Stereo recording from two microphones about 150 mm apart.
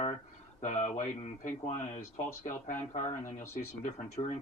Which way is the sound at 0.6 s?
50° left (ahead or behind).